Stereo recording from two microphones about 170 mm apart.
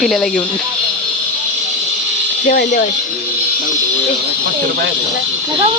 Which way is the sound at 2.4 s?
55° left (ahead or behind).